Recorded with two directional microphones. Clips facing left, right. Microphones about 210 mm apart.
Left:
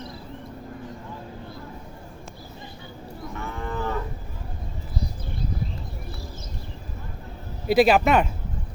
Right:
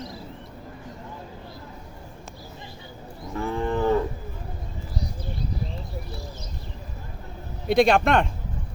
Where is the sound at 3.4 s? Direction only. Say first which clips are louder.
Right 7 dB; 30° right (ahead or behind).